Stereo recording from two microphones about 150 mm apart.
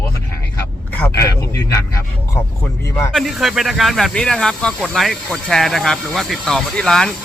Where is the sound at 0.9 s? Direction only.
15° left (ahead or behind).